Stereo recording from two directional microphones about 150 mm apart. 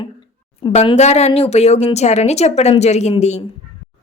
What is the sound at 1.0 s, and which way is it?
A woman's voice, 45° left (ahead or behind).